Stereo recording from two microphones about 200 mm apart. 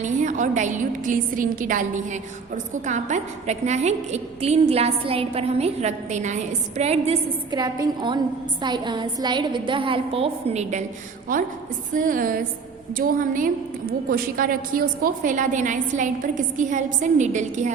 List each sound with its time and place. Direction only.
0.0 s a woman's voice: 40° right (ahead or behind)
2.8 s a woman's voice: 35° right (ahead or behind)